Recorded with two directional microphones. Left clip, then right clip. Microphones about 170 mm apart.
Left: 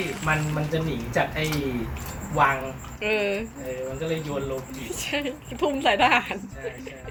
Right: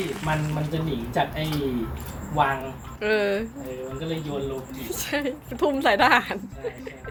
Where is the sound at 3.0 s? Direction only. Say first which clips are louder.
Right 2 dB; 25° right (ahead or behind).